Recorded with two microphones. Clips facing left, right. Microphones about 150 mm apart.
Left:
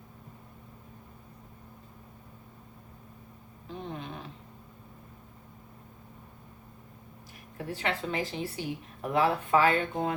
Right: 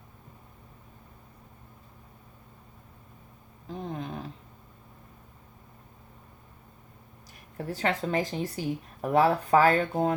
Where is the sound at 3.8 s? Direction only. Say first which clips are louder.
Right 4 dB; 40° right (ahead or behind).